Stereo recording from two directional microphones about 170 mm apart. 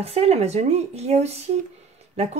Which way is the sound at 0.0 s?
35° right (ahead or behind).